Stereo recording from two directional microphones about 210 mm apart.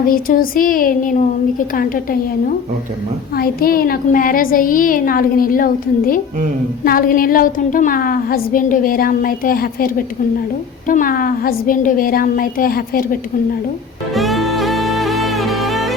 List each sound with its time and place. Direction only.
0.0 s speech: 45° left (ahead or behind)
3.3 s a woman's voice: 45° left (ahead or behind)
14.1 s music: centre (ahead or behind)